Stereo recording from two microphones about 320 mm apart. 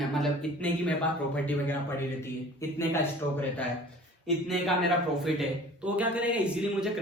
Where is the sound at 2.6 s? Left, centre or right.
Centre.